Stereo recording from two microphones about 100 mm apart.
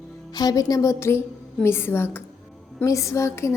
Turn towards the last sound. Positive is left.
turn(degrees=30)  # may be behind; listen again after turning